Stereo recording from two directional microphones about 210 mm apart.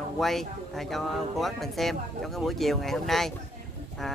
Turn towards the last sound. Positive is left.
turn(degrees=0)  # may be behind; listen again after turning